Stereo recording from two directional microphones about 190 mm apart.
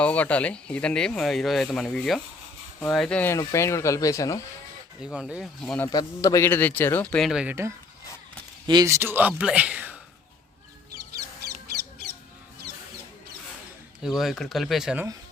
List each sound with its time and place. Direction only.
0.0 s speech: 5° left (ahead or behind)
5.0 s speech: 5° right (ahead or behind)
5.9 s speech: 20° left (ahead or behind); by 10.0 s 5° right (ahead or behind)
14.0 s speech: centre (ahead or behind)